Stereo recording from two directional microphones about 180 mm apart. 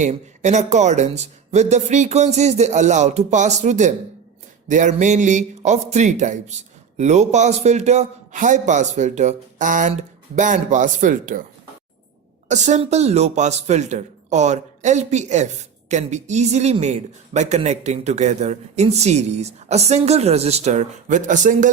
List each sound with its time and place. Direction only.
0.0 s a man's voice: 40° right (ahead or behind)
12.5 s speech: 40° right (ahead or behind)